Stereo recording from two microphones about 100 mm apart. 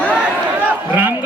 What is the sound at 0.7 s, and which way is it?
Speech, 15° right (ahead or behind).